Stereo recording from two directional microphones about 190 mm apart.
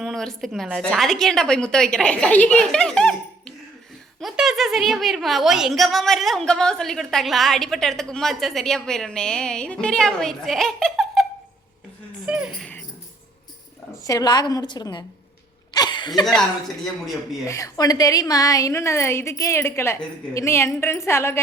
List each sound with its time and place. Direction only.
0.0 s a woman's voice: centre (ahead or behind)
14.0 s a woman's voice: 20° left (ahead or behind)
15.7 s a sound: 20° left (ahead or behind)
17.4 s a woman's voice: 15° left (ahead or behind)